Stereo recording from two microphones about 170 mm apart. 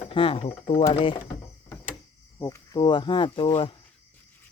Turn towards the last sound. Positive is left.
turn(degrees=30)  # may be behind; listen again after turning